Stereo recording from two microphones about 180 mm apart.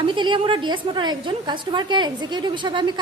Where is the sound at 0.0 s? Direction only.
25° right (ahead or behind).